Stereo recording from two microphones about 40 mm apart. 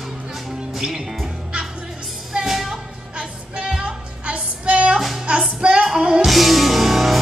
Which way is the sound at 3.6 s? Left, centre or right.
Centre.